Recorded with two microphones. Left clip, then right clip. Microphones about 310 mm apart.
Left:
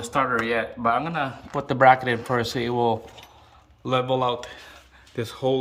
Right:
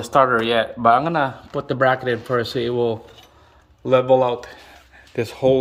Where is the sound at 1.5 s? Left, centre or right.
Centre.